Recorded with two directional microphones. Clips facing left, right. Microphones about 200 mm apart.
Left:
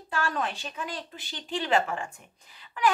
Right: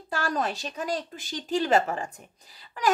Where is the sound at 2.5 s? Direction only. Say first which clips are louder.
Even; 40° right (ahead or behind).